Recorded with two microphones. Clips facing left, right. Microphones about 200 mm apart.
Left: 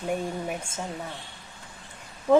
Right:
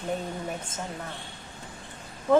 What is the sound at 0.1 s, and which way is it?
Speech, 10° left (ahead or behind).